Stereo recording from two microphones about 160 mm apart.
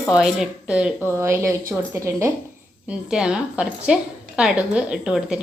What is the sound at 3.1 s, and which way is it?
A woman's voice, 5° right (ahead or behind).